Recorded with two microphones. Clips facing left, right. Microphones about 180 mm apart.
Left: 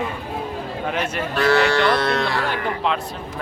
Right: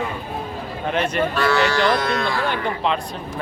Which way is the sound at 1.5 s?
55° left (ahead or behind).